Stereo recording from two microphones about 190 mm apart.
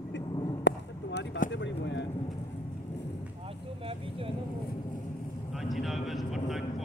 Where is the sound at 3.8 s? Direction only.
30° right (ahead or behind).